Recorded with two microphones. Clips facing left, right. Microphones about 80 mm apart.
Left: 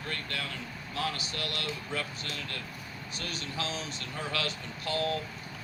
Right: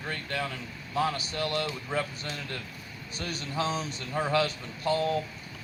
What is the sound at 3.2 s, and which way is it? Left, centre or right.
Speech, right.